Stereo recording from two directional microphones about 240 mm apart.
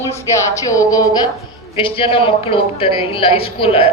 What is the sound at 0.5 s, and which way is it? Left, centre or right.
A woman's voice, centre.